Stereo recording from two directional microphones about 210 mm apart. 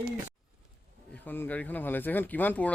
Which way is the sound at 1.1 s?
10° left (ahead or behind).